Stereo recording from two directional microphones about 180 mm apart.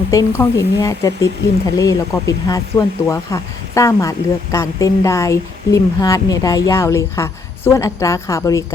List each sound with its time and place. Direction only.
0.1 s speech: 20° left (ahead or behind)